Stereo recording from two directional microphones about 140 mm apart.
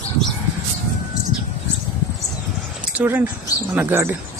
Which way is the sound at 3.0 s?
15° right (ahead or behind).